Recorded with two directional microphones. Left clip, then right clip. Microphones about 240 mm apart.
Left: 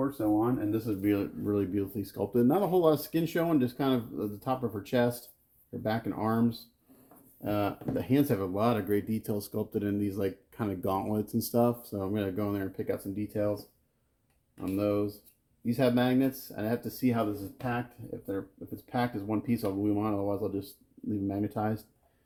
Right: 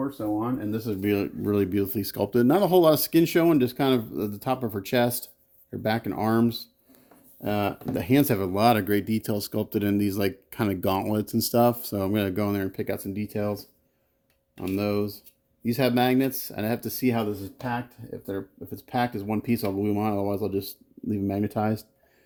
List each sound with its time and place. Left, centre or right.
0.3 s speech: right
1.0 s speech: right
14.8 s speech: right